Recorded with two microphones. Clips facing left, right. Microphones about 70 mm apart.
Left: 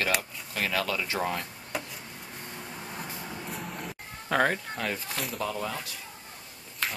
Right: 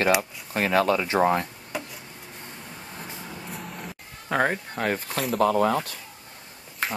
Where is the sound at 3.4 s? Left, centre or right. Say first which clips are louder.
Right 1 dB; centre.